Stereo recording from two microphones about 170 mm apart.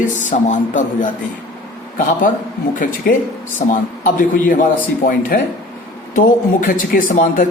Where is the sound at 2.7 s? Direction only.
50° left (ahead or behind).